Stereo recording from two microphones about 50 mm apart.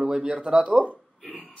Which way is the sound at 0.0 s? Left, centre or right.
Centre.